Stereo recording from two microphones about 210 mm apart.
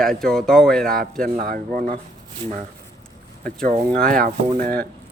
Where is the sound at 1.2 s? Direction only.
40° right (ahead or behind).